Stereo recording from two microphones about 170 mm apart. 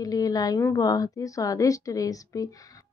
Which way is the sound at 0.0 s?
20° left (ahead or behind).